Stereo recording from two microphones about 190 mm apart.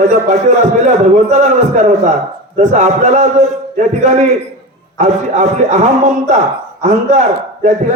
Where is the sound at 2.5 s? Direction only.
35° right (ahead or behind).